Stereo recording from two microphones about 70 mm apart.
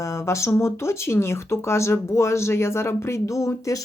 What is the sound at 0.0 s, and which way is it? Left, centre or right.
Speech, left.